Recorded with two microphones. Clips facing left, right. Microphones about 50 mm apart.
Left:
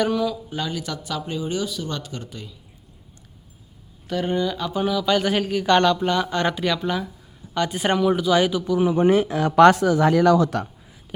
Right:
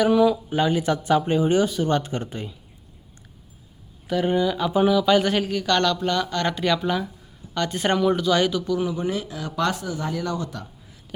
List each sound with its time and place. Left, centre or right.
0.1 s speech: centre
4.0 s speech: centre
5.6 s a man's voice: centre
6.5 s a man's voice: centre
8.9 s speech: left
9.7 s speech: left